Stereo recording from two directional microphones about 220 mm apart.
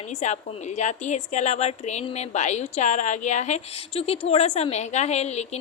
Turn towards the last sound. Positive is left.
turn(degrees=30)  # may be behind; listen again after turning